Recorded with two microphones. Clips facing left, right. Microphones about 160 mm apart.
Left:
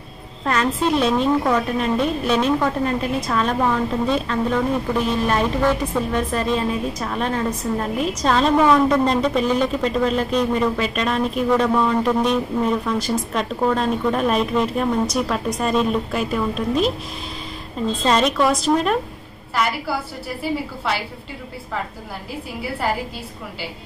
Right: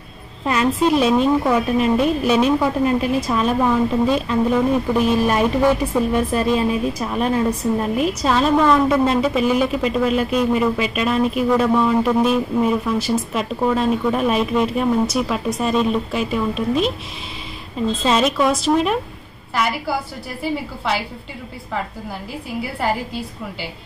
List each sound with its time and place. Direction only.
0.5 s a woman's voice: 10° right (ahead or behind)
18.0 s a woman's voice: 5° right (ahead or behind)